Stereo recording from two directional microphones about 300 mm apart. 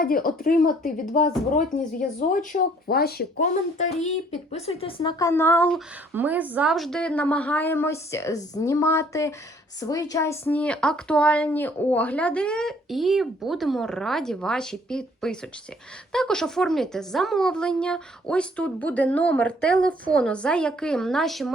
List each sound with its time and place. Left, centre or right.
0.0 s a woman's voice: left; by 21.5 s centre